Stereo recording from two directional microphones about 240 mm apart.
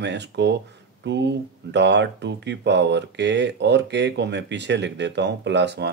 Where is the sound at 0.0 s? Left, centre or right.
Right.